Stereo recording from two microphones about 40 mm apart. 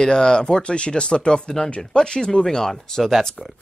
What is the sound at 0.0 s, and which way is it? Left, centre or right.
Speech, centre.